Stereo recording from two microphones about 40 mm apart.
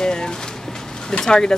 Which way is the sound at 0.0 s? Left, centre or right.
Centre.